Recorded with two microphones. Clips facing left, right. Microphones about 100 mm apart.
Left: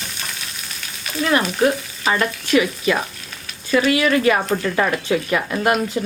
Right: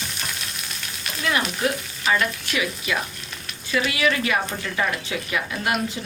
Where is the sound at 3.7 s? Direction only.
40° left (ahead or behind).